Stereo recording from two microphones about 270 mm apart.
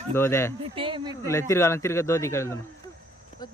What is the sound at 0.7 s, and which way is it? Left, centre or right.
Speech, centre.